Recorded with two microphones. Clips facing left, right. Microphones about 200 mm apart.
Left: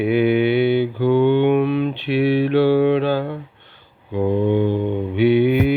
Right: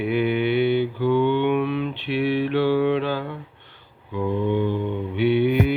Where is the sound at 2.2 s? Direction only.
70° left (ahead or behind).